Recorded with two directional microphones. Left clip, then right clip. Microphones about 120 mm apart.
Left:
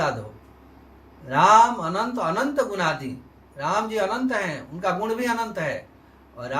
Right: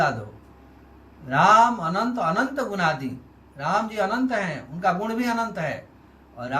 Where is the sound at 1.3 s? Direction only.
30° left (ahead or behind).